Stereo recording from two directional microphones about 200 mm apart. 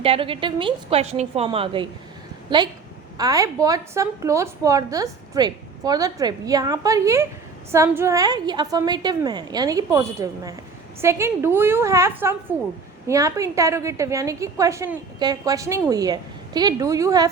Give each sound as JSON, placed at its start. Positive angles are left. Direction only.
{"t": 0.0, "sound": "a woman's voice", "side_deg": -25}